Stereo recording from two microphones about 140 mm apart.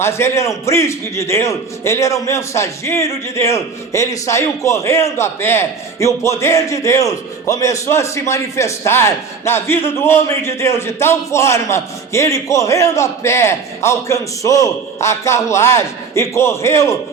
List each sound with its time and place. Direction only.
0.0 s a man's voice: 20° left (ahead or behind)